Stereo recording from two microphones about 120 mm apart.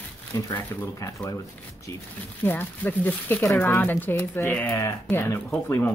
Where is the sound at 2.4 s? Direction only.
15° left (ahead or behind).